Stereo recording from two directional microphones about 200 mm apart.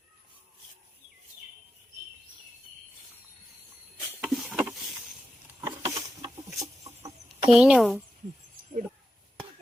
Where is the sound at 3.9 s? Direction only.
5° right (ahead or behind).